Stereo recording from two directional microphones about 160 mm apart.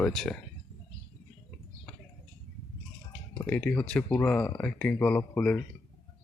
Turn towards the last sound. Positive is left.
turn(degrees=10)  # may be behind; listen again after turning